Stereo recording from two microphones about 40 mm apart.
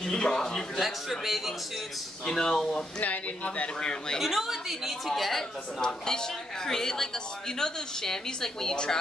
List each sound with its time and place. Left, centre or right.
0.0 s a woman's voice: centre
1.2 s speech: centre
2.2 s a woman's voice: centre
3.0 s speech: left
4.2 s speech: centre
5.8 s a woman's voice: centre